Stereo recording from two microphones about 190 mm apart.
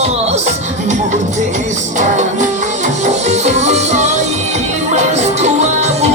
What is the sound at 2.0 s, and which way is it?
Music, 40° right (ahead or behind).